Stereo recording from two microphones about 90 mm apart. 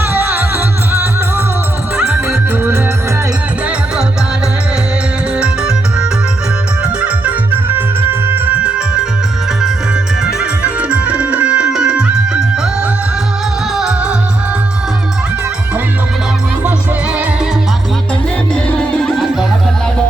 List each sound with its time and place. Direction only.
0.0 s music: 25° right (ahead or behind)
2.0 s music: 10° right (ahead or behind)
5.4 s music: 10° right (ahead or behind)
10.4 s music: 15° right (ahead or behind)
13.7 s music: 5° right (ahead or behind)
18.5 s music: 10° left (ahead or behind)